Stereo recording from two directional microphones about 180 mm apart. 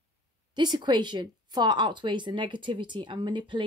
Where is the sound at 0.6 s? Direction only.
25° right (ahead or behind).